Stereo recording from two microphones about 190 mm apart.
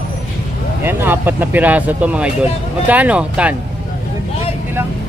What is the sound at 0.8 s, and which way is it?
Speech, 10° right (ahead or behind).